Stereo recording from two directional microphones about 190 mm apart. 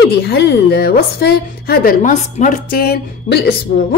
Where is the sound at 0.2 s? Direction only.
60° left (ahead or behind).